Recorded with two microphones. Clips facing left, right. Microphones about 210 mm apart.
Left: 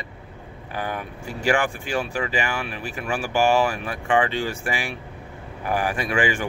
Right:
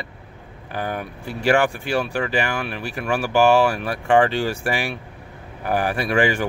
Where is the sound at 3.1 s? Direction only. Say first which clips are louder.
Right 4 dB; 65° right (ahead or behind).